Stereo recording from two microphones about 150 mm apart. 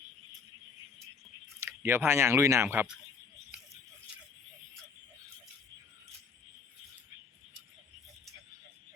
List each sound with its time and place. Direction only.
1.5 s speech: 15° right (ahead or behind)